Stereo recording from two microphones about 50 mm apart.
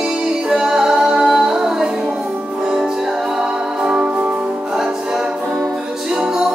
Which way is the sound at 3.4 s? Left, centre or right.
Centre.